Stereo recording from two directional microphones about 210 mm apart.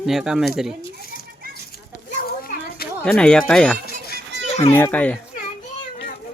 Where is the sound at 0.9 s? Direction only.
45° left (ahead or behind).